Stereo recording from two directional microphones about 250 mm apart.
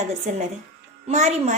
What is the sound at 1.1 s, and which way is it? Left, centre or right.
Speech, right.